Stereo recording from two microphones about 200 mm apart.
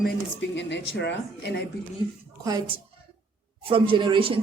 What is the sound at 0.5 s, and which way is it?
Speech, 60° left (ahead or behind).